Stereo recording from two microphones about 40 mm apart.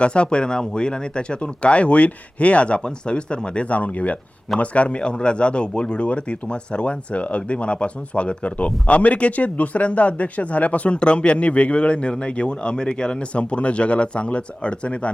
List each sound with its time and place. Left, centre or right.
0.0 s speech: left
3.7 s speech: left